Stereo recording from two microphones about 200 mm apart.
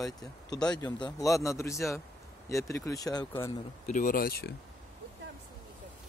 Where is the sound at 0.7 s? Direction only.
20° left (ahead or behind).